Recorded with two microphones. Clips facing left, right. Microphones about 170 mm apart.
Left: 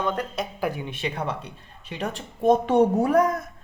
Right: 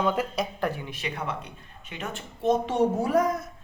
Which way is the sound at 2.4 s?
55° left (ahead or behind).